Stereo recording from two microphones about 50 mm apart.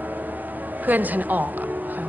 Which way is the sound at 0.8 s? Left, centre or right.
Right.